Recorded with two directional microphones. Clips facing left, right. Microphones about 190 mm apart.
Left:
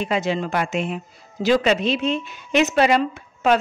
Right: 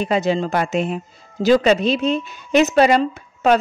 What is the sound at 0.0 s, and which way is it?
Speech, 35° right (ahead or behind).